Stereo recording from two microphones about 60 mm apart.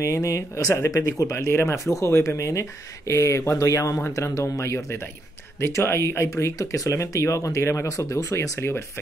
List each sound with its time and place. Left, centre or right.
0.0 s speech: left